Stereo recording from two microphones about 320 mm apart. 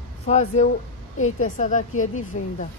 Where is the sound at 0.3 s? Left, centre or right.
Left.